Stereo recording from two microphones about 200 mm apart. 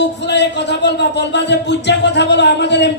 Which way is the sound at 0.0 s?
60° left (ahead or behind).